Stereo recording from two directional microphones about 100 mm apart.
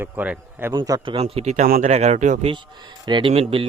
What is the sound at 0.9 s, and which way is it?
Speech, 35° right (ahead or behind).